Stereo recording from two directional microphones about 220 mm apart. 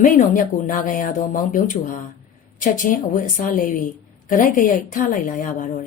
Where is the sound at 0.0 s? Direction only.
35° left (ahead or behind).